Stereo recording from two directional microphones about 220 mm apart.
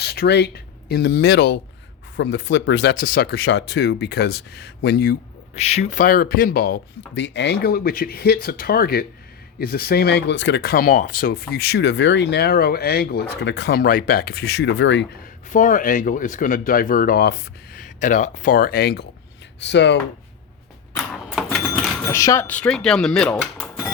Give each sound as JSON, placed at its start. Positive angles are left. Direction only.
{"t": 0.0, "sound": "speech", "side_deg": 50}
{"t": 5.5, "sound": "speech", "side_deg": 30}
{"t": 15.2, "sound": "speech", "side_deg": 35}
{"t": 20.9, "sound": "a sound", "side_deg": 10}
{"t": 22.1, "sound": "speech", "side_deg": 15}